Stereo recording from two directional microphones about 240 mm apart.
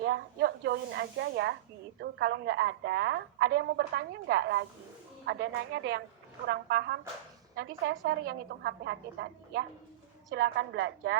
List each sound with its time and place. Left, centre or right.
0.0 s a woman's voice: right